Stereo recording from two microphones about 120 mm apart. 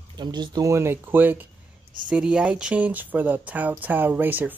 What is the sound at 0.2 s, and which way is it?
Speech, 35° right (ahead or behind).